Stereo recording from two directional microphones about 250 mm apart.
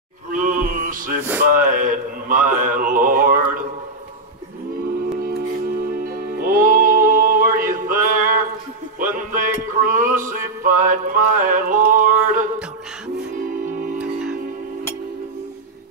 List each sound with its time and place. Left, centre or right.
0.3 s a sound: right
1.5 s speech: right
5.2 s music: right